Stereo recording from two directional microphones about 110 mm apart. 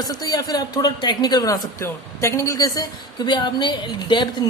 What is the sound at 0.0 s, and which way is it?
Speech, 35° left (ahead or behind).